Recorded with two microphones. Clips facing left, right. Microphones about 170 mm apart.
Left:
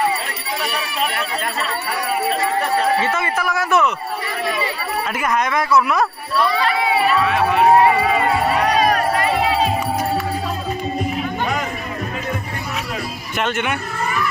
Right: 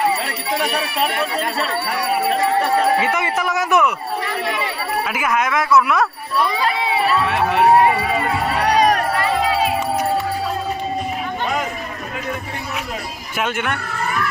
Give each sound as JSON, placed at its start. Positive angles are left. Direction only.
{"t": 3.0, "sound": "speech", "side_deg": -15}
{"t": 5.1, "sound": "speech", "side_deg": -5}
{"t": 13.4, "sound": "speech", "side_deg": -5}